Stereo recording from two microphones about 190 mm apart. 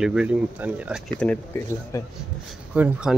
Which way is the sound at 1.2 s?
10° left (ahead or behind).